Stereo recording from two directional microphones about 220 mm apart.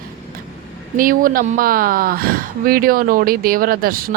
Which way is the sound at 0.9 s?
40° right (ahead or behind).